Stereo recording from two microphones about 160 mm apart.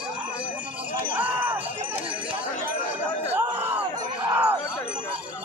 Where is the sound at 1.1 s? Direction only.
10° right (ahead or behind).